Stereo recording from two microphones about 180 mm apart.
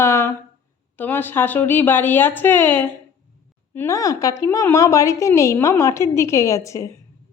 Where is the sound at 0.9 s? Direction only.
10° left (ahead or behind).